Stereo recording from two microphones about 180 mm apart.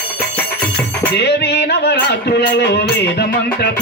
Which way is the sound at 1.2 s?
65° left (ahead or behind).